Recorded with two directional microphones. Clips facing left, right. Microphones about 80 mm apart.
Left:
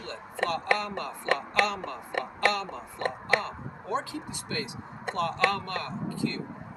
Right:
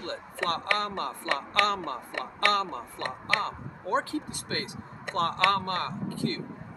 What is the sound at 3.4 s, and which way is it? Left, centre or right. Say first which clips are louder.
Speech: right 3 dB; right.